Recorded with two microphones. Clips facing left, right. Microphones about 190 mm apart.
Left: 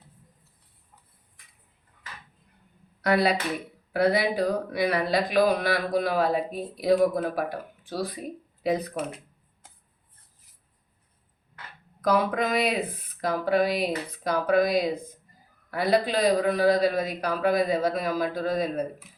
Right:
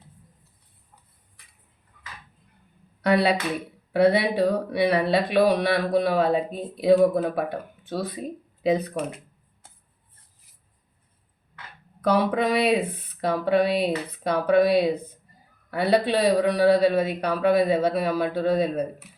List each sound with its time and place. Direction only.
3.0 s a woman's voice: 30° right (ahead or behind)
12.0 s speech: 30° right (ahead or behind)